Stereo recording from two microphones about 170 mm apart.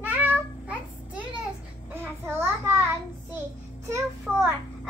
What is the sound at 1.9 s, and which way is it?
Speech, 15° right (ahead or behind).